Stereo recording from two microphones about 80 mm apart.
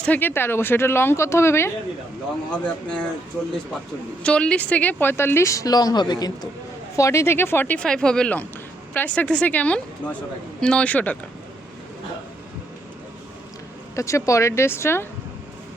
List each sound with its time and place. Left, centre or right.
0.0 s speech: left
2.5 s speech: centre
4.2 s speech: centre; by 6.5 s left
6.9 s speech: left
7.8 s speech: centre
13.9 s speech: left